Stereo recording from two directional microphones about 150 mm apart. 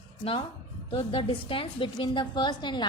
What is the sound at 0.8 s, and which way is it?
A woman's voice, 35° left (ahead or behind).